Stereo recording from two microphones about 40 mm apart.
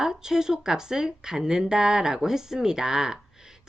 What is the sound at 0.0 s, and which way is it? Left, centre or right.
Speech, centre.